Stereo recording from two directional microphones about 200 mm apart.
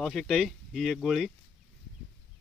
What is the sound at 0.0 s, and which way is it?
Speech, centre (ahead or behind).